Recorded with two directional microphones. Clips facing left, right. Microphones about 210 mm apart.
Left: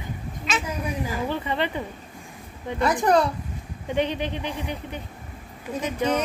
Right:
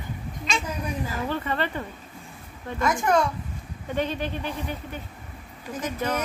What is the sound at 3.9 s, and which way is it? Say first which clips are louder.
Speech: left 2 dB; 15° left (ahead or behind).